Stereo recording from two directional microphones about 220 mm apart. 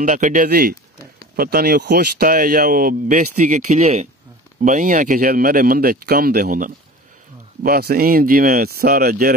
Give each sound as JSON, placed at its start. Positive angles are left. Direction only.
{"t": 0.0, "sound": "speech", "side_deg": -35}